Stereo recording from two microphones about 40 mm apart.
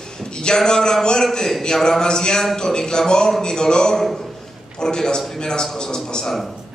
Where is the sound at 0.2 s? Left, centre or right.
Left.